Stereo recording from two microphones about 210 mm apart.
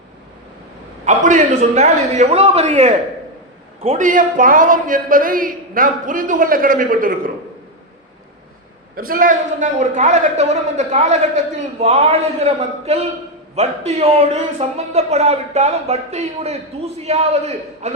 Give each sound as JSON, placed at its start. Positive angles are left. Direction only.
{"t": 1.0, "sound": "speech", "side_deg": -35}
{"t": 9.0, "sound": "a man's voice", "side_deg": -40}